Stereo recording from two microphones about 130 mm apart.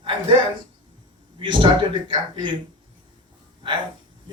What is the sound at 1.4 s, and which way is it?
A man's voice, 40° right (ahead or behind).